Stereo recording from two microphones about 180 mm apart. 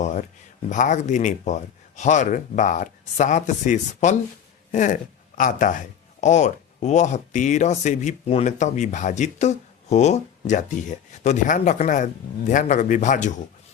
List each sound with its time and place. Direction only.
0.0 s speech: 45° left (ahead or behind)